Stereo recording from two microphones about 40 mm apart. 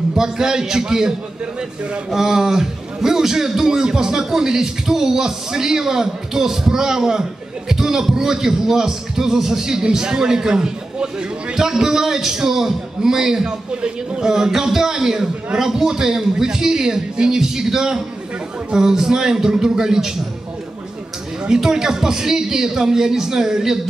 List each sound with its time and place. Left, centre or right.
0.1 s a man's voice: centre
21.5 s a man's voice: centre